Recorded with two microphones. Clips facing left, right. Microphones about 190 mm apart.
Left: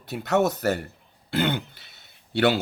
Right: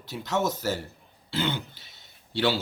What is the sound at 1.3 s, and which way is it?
Throat clearing, 60° left (ahead or behind).